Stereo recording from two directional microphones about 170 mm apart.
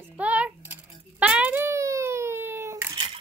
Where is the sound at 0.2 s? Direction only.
10° right (ahead or behind).